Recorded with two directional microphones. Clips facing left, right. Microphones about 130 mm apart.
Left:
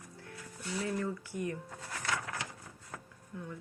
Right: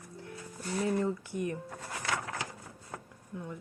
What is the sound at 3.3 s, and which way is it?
Speech, 20° right (ahead or behind).